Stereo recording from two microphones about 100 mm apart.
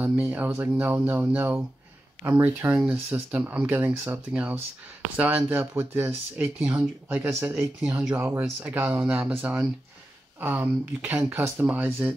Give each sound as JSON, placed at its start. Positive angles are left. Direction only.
{"t": 0.0, "sound": "speech", "side_deg": -15}
{"t": 2.8, "sound": "speech", "side_deg": -5}
{"t": 3.3, "sound": "speech", "side_deg": -15}
{"t": 6.6, "sound": "speech", "side_deg": -10}
{"t": 11.6, "sound": "speech", "side_deg": -15}